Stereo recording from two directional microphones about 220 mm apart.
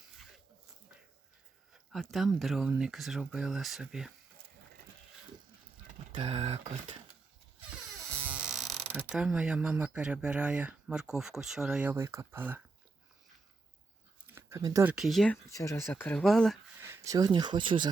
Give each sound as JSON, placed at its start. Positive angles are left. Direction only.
{"t": 1.7, "sound": "speech", "side_deg": 0}
{"t": 6.1, "sound": "speech", "side_deg": -30}
{"t": 8.0, "sound": "a sound", "side_deg": -10}
{"t": 9.0, "sound": "speech", "side_deg": -5}
{"t": 14.3, "sound": "a sound", "side_deg": -10}
{"t": 14.9, "sound": "speech", "side_deg": 0}
{"t": 16.8, "sound": "speech", "side_deg": -10}